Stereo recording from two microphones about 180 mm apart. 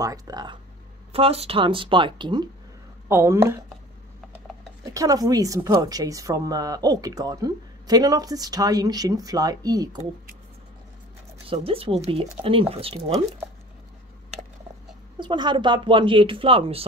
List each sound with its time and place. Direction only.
0.0 s a woman's voice: 20° right (ahead or behind)
1.1 s a woman's voice: 35° right (ahead or behind); by 3.6 s 15° right (ahead or behind)
4.8 s a woman's voice: 20° right (ahead or behind)
11.4 s speech: 30° right (ahead or behind)
15.1 s a woman's voice: 25° right (ahead or behind)